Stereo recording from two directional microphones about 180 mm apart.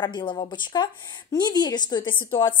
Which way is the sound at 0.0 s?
25° left (ahead or behind).